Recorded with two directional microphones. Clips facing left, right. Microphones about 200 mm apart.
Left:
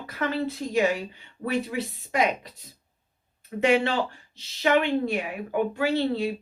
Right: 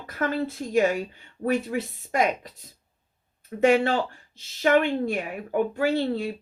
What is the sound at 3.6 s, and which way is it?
Speech, 45° right (ahead or behind).